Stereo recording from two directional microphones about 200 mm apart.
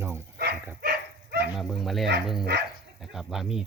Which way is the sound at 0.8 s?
55° right (ahead or behind).